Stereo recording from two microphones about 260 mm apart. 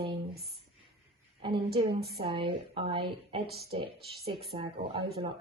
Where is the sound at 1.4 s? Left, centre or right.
Centre.